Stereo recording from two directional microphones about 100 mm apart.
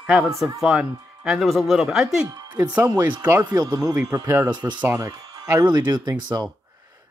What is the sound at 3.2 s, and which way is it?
Speech, 15° right (ahead or behind).